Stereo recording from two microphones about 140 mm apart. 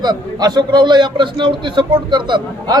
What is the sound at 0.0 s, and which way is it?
A man's voice, 30° right (ahead or behind).